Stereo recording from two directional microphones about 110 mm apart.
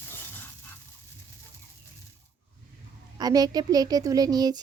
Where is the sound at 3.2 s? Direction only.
35° right (ahead or behind).